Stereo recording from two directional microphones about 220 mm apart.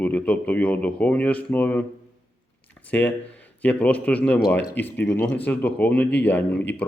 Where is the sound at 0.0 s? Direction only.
5° left (ahead or behind).